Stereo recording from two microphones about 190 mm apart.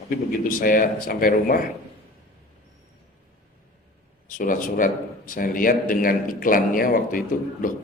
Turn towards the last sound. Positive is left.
turn(degrees=45)  # may be behind; listen again after turning